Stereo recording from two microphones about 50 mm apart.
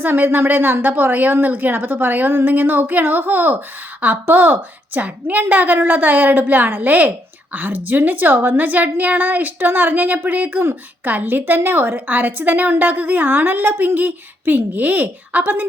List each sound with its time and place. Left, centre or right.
0.0 s a woman's voice: right